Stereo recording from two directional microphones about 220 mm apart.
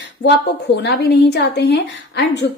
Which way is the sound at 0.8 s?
50° left (ahead or behind).